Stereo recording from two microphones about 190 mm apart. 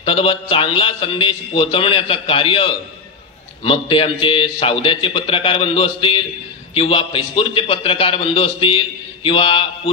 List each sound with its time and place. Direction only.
0.0 s a man's voice: 30° left (ahead or behind)